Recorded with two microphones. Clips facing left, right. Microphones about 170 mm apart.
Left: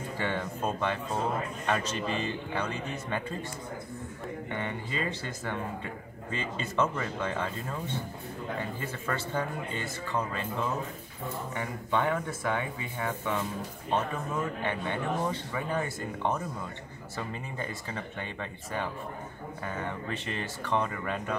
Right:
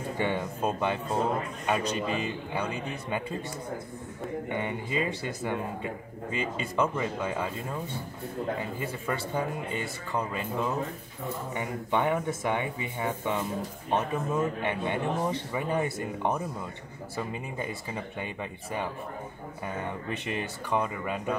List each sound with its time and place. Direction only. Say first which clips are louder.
0.2 s speech: right 3 dB; 15° right (ahead or behind)
4.5 s speech: right 2 dB; 15° right (ahead or behind)
8.7 s speech: right 2 dB; 15° right (ahead or behind)
11.5 s speech: right 2 dB; 15° right (ahead or behind)